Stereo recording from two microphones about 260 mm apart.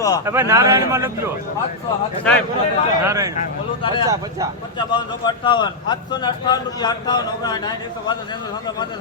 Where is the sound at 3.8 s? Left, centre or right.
Centre.